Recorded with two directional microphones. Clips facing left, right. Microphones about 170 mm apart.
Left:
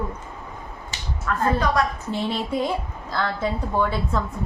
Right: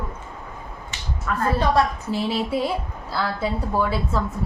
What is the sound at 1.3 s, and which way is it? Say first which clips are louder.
A woman's voice: even; 5° right (ahead or behind).